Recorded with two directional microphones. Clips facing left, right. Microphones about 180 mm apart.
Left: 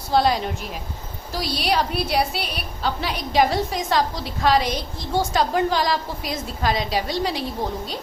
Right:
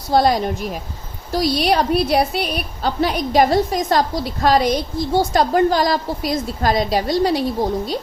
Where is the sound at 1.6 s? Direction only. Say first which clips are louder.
Right 3 dB; 50° right (ahead or behind).